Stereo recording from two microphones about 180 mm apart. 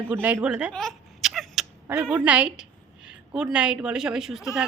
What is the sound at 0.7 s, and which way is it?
Cat, centre (ahead or behind).